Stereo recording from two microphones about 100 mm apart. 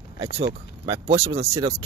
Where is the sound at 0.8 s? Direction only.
70° right (ahead or behind).